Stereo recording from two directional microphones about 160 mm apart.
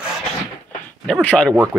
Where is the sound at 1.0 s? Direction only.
5° left (ahead or behind).